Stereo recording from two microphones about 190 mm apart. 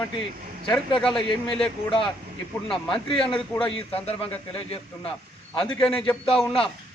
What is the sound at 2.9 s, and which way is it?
A man's voice, 25° left (ahead or behind).